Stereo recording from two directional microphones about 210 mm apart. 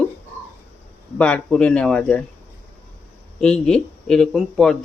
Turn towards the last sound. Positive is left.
turn(degrees=5)  # may be behind; listen again after turning